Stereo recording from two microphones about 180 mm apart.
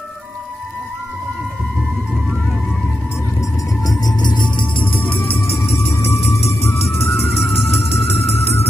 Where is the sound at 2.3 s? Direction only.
5° left (ahead or behind).